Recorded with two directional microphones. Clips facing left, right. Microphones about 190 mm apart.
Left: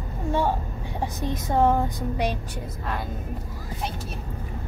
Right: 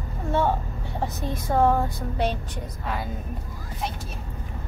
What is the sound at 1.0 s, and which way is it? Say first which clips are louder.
Speech: left 1 dB; 20° left (ahead or behind).